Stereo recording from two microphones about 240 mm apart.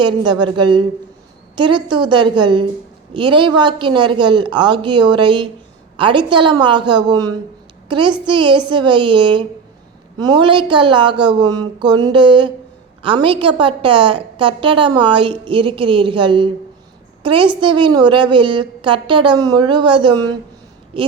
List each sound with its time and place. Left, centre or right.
0.0 s a woman's voice: centre